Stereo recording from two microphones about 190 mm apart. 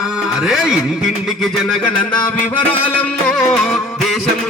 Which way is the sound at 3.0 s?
5° left (ahead or behind).